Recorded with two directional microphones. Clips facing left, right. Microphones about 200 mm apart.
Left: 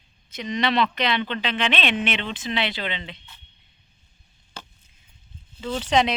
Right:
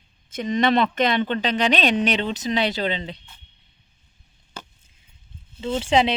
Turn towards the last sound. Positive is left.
turn(degrees=-30)  # may be behind; listen again after turning